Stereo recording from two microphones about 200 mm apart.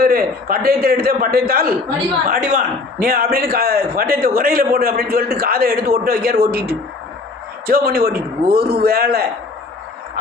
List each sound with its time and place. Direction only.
0.0 s a man's voice: 50° right (ahead or behind)